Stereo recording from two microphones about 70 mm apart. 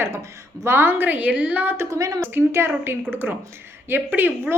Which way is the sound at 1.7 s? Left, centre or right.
Right.